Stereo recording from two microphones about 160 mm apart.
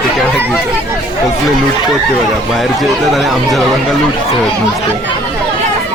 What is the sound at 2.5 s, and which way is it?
Speech, centre (ahead or behind).